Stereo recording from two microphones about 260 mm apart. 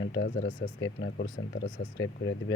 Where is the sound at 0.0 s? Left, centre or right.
Left.